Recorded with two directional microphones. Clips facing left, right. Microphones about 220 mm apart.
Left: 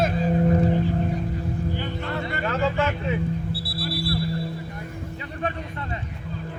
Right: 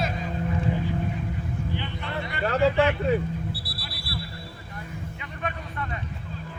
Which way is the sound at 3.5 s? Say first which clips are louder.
Left 6 dB; 25° left (ahead or behind).